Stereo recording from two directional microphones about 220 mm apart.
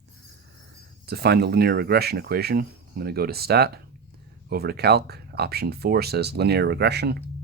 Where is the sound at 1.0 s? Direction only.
45° right (ahead or behind).